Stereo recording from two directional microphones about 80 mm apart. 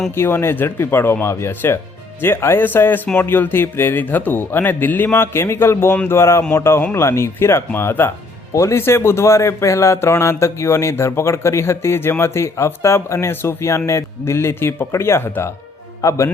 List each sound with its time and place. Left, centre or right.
0.1 s speech: left